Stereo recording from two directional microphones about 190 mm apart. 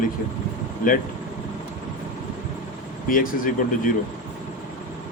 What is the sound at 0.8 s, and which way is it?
Speech, 45° left (ahead or behind).